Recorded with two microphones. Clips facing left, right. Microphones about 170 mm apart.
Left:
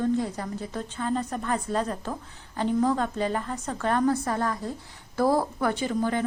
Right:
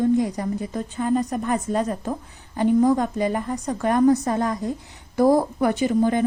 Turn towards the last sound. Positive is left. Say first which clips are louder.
# right 6 dB
turn(degrees=-15)  # may be behind; listen again after turning